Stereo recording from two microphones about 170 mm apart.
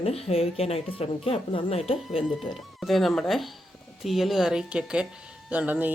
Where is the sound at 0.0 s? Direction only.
35° left (ahead or behind).